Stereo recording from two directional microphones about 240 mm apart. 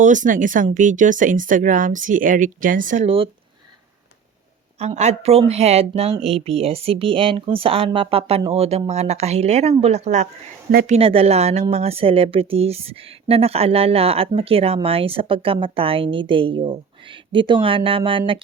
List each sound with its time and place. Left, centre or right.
0.0 s speech: right
4.8 s speech: right